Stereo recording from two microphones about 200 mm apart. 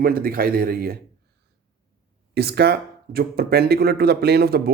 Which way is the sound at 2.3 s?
55° right (ahead or behind).